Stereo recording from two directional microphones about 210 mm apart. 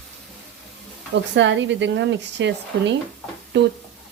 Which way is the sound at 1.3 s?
60° right (ahead or behind).